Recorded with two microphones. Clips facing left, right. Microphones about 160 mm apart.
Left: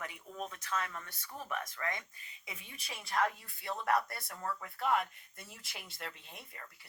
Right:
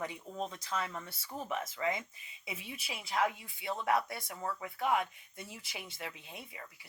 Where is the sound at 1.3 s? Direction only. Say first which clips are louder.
Right 3 dB; 25° right (ahead or behind).